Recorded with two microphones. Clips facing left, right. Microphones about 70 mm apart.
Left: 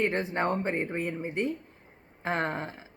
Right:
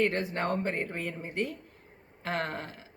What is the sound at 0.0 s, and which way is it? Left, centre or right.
Speech, left.